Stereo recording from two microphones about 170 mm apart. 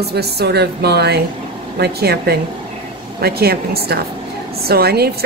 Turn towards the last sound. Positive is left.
turn(degrees=-70)  # may be behind; listen again after turning